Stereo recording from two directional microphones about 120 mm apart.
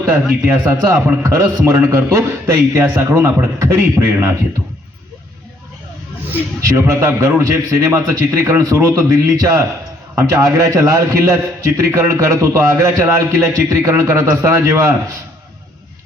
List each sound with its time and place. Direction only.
0.4 s a man's voice: 20° right (ahead or behind)
6.3 s a man's voice: 20° right (ahead or behind)